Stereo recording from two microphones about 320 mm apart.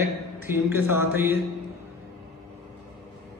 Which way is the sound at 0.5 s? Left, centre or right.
Centre.